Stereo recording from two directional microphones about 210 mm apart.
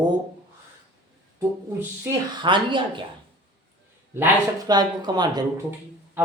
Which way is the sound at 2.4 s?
25° right (ahead or behind).